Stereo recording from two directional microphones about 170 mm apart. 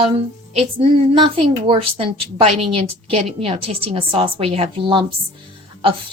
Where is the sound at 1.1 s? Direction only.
30° right (ahead or behind).